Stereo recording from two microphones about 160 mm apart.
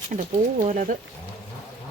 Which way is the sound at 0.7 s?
50° right (ahead or behind).